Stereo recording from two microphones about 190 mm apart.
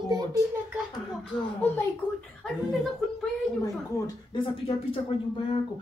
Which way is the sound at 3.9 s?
15° left (ahead or behind).